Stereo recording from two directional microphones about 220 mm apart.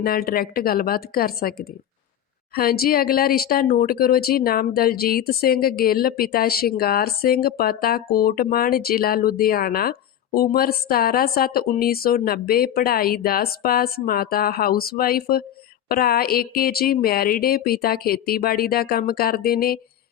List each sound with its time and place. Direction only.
0.0 s speech: 45° left (ahead or behind)